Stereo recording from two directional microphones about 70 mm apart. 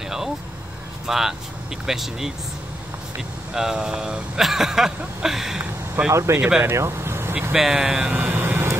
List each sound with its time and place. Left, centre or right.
1.0 s speech: centre
3.5 s speech: centre
5.6 s speech: right
6.1 s speech: right
7.5 s speech: centre
8.1 s vehicle: right